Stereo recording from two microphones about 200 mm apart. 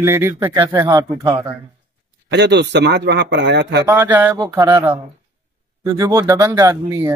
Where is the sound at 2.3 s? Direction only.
60° right (ahead or behind).